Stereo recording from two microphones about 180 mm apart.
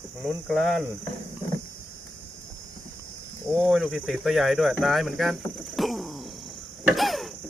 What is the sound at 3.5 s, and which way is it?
Speech, centre (ahead or behind).